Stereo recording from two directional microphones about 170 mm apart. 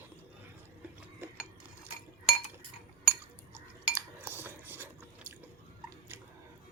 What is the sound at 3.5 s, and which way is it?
Dishes, 10° right (ahead or behind).